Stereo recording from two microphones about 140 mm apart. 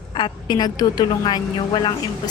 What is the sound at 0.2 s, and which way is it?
A woman's voice, 30° left (ahead or behind).